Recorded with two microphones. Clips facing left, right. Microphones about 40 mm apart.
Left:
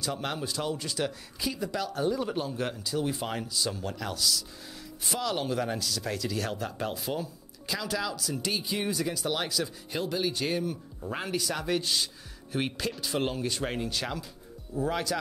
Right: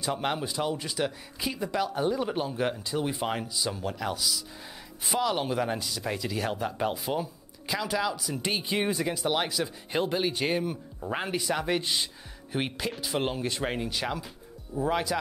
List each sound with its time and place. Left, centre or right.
0.0 s speech: right